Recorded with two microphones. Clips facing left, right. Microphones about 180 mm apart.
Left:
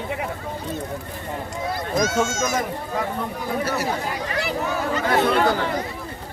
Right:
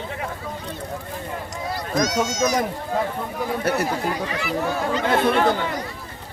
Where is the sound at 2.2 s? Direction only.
50° left (ahead or behind).